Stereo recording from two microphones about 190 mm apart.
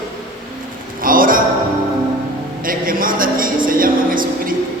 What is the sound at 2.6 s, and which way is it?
Speech, 50° right (ahead or behind).